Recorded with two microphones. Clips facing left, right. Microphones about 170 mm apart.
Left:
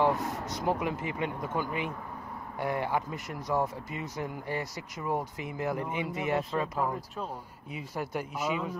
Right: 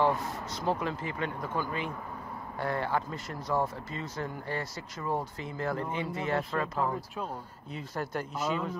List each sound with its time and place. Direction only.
0.0 s speech: 15° left (ahead or behind)